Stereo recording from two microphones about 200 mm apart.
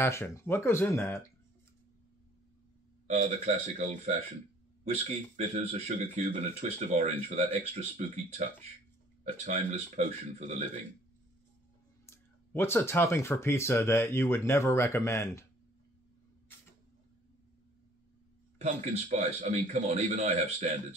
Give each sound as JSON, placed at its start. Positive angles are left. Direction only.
{"t": 0.0, "sound": "speech", "side_deg": 15}
{"t": 3.1, "sound": "speech", "side_deg": -35}
{"t": 9.2, "sound": "speech", "side_deg": -35}
{"t": 12.1, "sound": "speech", "side_deg": 10}
{"t": 18.6, "sound": "speech", "side_deg": -35}